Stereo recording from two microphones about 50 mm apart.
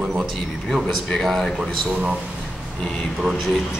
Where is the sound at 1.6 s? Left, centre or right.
Centre.